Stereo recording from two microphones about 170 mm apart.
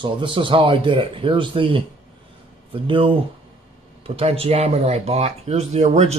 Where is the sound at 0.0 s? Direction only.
30° right (ahead or behind).